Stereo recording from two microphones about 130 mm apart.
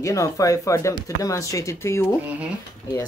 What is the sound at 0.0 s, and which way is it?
Speech, 25° left (ahead or behind).